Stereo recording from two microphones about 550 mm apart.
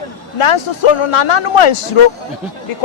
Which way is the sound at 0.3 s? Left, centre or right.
Left.